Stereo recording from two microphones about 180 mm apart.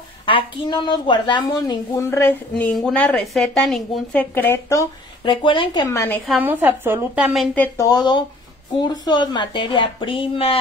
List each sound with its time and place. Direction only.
0.3 s a woman's voice: 25° left (ahead or behind)
2.0 s a woman's voice: 10° left (ahead or behind)
5.2 s a woman's voice: 25° left (ahead or behind)
5.9 s a woman's voice: 15° left (ahead or behind)
6.2 s a woman's voice: 5° right (ahead or behind)
7.5 s a woman's voice: 15° left (ahead or behind); by 10.6 s 30° left (ahead or behind)